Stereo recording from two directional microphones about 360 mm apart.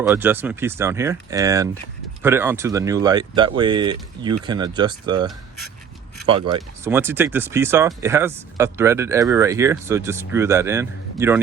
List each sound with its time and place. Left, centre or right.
0.0 s speech: centre